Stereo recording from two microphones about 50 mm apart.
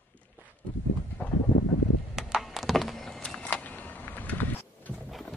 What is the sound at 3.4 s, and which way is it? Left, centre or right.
Vehicle, left.